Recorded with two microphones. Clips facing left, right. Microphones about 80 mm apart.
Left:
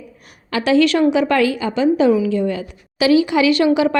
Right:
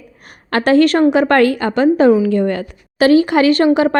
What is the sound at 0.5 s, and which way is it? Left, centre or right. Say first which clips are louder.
A woman's voice: right 3 dB; right.